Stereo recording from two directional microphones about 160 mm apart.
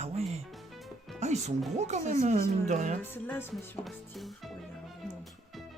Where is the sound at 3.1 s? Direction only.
15° left (ahead or behind).